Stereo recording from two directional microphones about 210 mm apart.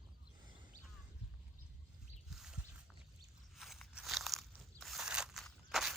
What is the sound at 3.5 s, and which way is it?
Crunch, centre (ahead or behind).